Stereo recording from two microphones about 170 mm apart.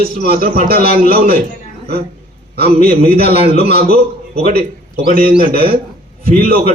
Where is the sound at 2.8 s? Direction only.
60° right (ahead or behind).